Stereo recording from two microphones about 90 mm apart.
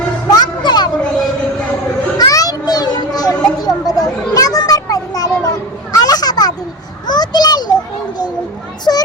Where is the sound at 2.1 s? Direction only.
45° left (ahead or behind).